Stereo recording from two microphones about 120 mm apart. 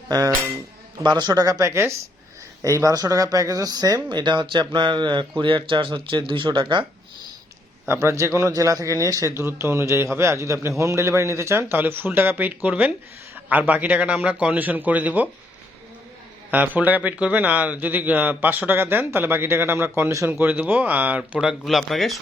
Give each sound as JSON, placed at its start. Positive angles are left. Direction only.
{"t": 0.1, "sound": "speech", "side_deg": -30}
{"t": 7.9, "sound": "speech", "side_deg": -20}
{"t": 16.5, "sound": "speech", "side_deg": -15}
{"t": 21.6, "sound": "speech", "side_deg": 0}